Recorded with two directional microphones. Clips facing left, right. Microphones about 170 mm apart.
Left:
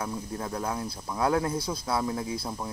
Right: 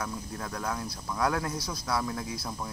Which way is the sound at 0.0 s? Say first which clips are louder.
Left 3 dB; 25° left (ahead or behind).